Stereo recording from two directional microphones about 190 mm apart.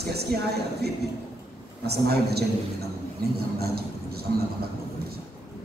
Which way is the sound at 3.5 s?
55° right (ahead or behind).